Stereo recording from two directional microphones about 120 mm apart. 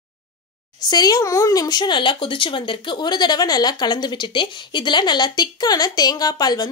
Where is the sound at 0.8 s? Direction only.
35° left (ahead or behind).